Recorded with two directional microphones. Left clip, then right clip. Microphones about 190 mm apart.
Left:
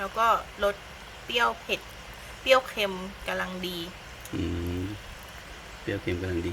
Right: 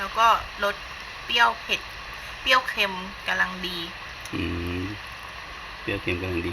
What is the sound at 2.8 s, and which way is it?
Speech, 50° left (ahead or behind).